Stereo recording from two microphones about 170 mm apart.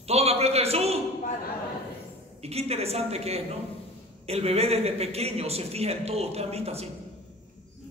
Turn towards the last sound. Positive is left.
turn(degrees=-35)  # may be behind; listen again after turning